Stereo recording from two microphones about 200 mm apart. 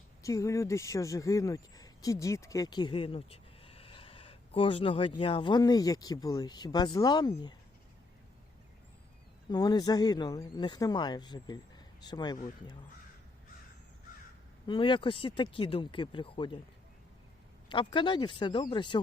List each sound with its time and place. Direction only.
0.2 s speech: 15° left (ahead or behind)
9.5 s speech: 20° left (ahead or behind)
14.7 s speech: 25° left (ahead or behind)
17.7 s speech: 25° left (ahead or behind)